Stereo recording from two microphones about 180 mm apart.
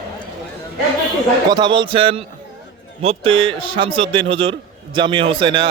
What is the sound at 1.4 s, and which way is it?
A man's voice, 25° right (ahead or behind).